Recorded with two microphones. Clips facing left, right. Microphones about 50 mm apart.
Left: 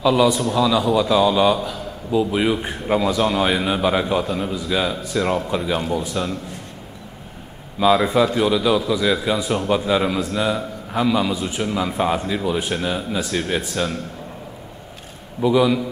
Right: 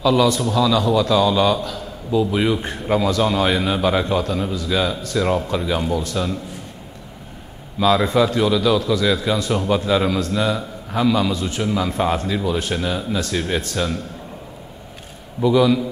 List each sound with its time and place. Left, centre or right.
0.0 s a man's voice: centre
7.8 s a man's voice: centre
15.4 s a man's voice: centre